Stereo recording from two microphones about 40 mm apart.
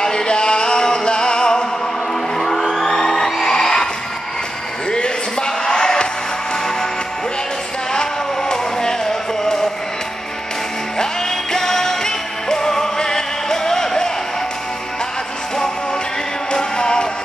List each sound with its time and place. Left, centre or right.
0.0 s music: left
2.3 s music: centre
4.9 s a sound: left
7.9 s vehicle: centre
11.0 s music: centre
16.5 s music: centre